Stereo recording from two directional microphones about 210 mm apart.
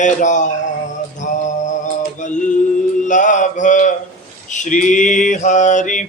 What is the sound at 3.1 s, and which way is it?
Mantra, 35° left (ahead or behind).